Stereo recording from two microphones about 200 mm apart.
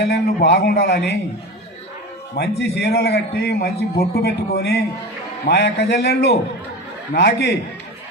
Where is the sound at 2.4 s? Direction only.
55° left (ahead or behind).